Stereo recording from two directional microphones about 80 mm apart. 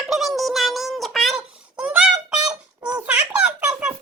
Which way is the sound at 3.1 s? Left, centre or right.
Centre.